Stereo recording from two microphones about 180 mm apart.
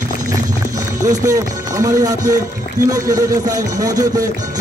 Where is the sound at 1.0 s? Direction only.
20° right (ahead or behind).